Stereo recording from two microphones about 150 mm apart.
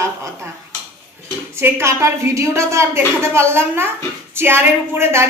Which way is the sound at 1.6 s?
20° right (ahead or behind).